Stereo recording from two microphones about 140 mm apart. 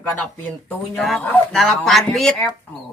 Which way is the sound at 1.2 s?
15° left (ahead or behind).